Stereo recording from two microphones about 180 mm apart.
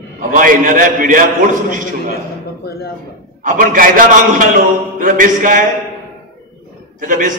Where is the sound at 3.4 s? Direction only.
50° right (ahead or behind).